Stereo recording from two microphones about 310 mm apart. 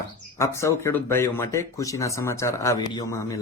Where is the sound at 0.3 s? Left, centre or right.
Centre.